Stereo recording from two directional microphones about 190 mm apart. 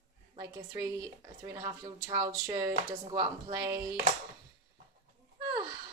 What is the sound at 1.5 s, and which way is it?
Speech, 20° right (ahead or behind).